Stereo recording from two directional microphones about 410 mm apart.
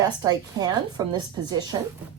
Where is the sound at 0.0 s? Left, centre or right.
Centre.